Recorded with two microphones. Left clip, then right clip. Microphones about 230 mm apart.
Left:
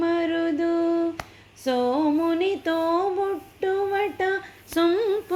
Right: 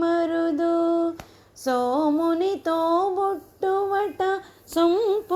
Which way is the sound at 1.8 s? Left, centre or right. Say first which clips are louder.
Even; centre.